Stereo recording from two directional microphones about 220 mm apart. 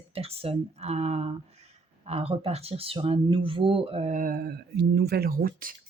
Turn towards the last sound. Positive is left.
turn(degrees=-40)  # may be behind; listen again after turning